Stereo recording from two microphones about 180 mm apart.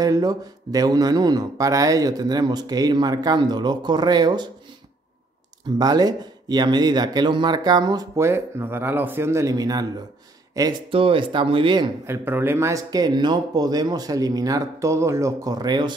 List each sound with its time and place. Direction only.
0.0 s speech: 20° right (ahead or behind)
5.8 s speech: 20° right (ahead or behind)
12.1 s speech: 10° right (ahead or behind)